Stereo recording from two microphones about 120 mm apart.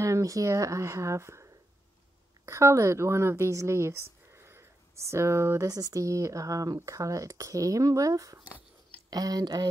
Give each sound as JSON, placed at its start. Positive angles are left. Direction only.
{"t": 0.0, "sound": "speech", "side_deg": -25}